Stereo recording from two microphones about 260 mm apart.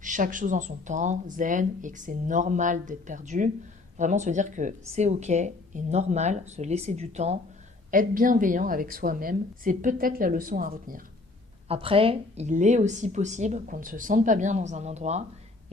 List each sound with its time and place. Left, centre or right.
0.0 s a woman's voice: right
11.7 s speech: right